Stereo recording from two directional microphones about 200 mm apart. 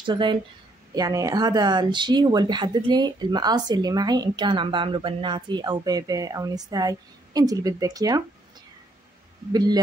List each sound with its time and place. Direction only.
0.0 s speech: 25° right (ahead or behind)
9.5 s speech: 20° right (ahead or behind)